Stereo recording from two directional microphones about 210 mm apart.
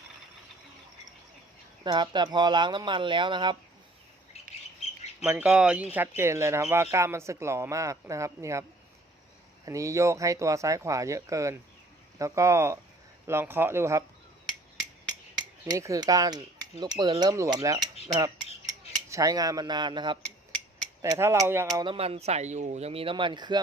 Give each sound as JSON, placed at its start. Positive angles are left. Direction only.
{"t": 1.8, "sound": "speech", "side_deg": -20}
{"t": 5.2, "sound": "speech", "side_deg": -5}
{"t": 9.6, "sound": "speech", "side_deg": -15}
{"t": 15.6, "sound": "speech", "side_deg": -15}
{"t": 18.1, "sound": "cutlery", "side_deg": -20}
{"t": 19.1, "sound": "speech", "side_deg": -15}
{"t": 21.8, "sound": "speech", "side_deg": -25}